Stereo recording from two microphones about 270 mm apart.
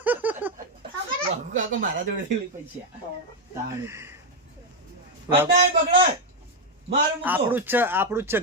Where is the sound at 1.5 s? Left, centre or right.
Right.